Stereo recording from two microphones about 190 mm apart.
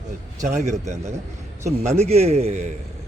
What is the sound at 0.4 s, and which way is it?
A man's voice, 40° right (ahead or behind).